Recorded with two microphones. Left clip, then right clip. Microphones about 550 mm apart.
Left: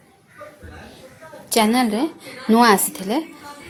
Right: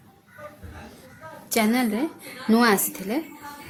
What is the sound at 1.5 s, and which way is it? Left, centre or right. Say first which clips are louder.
Speech: left 5 dB; right.